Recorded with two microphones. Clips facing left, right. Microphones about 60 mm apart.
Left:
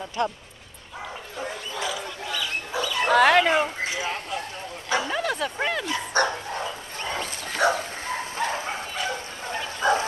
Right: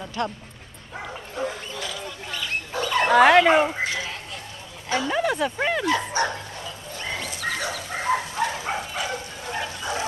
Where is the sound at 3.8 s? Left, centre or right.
Left.